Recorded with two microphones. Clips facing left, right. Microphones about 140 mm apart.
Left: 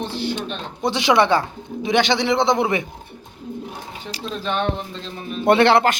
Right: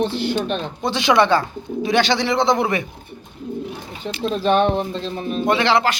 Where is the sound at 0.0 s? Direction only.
55° right (ahead or behind).